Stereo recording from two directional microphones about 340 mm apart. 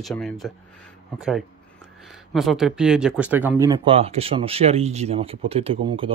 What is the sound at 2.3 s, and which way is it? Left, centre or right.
Speech, centre.